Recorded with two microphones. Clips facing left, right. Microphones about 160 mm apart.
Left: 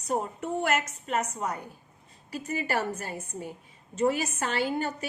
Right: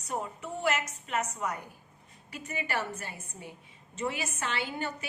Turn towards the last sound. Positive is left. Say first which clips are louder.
# left 6 dB
turn(degrees=40)  # may be behind; listen again after turning